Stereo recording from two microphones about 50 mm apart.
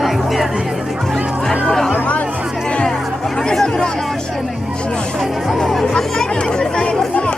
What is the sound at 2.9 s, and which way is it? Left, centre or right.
Music, centre.